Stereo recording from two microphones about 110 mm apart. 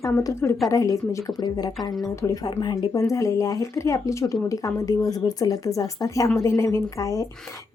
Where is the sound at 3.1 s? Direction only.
30° left (ahead or behind).